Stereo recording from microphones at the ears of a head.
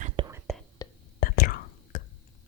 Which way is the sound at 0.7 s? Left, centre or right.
Left.